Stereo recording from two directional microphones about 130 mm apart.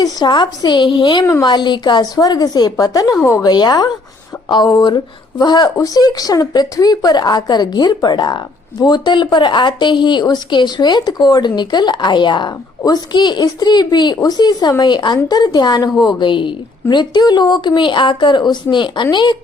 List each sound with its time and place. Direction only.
0.0 s a woman's voice: 35° left (ahead or behind)
1.2 s speech: 25° left (ahead or behind)
1.5 s a woman's voice: 35° left (ahead or behind)